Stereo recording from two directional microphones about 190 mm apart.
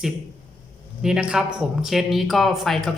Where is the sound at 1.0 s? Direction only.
5° right (ahead or behind).